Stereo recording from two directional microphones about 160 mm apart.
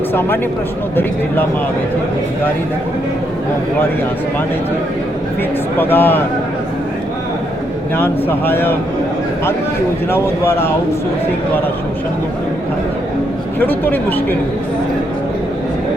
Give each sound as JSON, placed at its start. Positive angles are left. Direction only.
{"t": 0.1, "sound": "speech", "side_deg": 15}
{"t": 5.8, "sound": "speech", "side_deg": 15}
{"t": 7.9, "sound": "speech", "side_deg": 15}
{"t": 10.1, "sound": "speech", "side_deg": 15}
{"t": 13.6, "sound": "speech", "side_deg": 10}